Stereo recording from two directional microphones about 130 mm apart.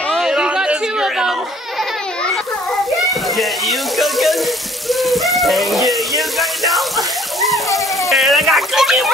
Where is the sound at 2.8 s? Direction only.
Centre (ahead or behind).